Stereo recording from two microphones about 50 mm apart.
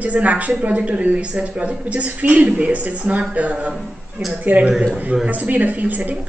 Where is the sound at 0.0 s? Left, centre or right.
Right.